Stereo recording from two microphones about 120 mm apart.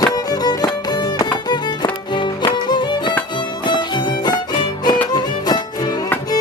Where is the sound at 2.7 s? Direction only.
40° left (ahead or behind).